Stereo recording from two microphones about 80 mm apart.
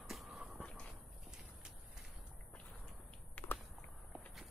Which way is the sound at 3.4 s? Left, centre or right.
Centre.